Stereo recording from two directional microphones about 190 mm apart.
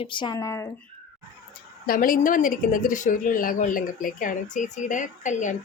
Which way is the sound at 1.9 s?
50° left (ahead or behind).